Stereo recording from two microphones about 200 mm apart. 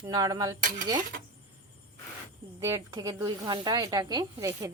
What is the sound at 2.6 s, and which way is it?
Speech, 20° right (ahead or behind).